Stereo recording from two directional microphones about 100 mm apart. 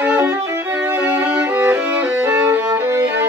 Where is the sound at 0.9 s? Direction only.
10° right (ahead or behind).